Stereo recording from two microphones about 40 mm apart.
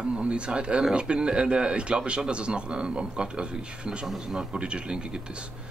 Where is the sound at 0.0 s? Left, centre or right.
Right.